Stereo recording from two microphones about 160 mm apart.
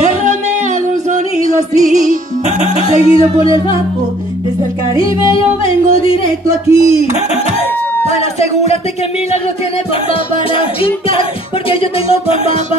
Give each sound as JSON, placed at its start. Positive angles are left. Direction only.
{"t": 0.0, "sound": "music", "side_deg": -50}
{"t": 1.4, "sound": "music", "side_deg": -50}
{"t": 3.0, "sound": "music", "side_deg": 35}
{"t": 6.0, "sound": "music", "side_deg": 35}
{"t": 8.1, "sound": "music", "side_deg": 40}
{"t": 10.8, "sound": "music", "side_deg": 35}